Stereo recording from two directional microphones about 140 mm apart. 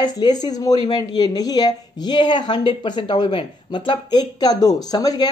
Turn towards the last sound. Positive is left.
turn(degrees=25)  # may be behind; listen again after turning